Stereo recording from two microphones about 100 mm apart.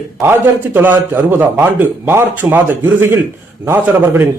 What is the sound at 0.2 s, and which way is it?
A man's voice, 20° right (ahead or behind).